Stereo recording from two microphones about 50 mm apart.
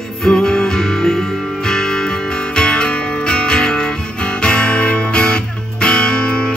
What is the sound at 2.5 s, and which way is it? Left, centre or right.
Music, centre.